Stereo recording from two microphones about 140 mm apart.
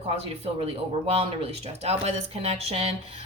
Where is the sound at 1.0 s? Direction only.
45° right (ahead or behind).